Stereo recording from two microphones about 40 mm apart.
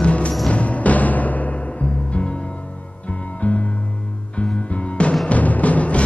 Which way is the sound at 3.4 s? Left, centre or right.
Left.